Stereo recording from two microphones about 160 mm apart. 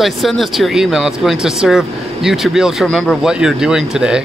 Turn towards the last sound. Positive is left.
turn(degrees=-5)  # may be behind; listen again after turning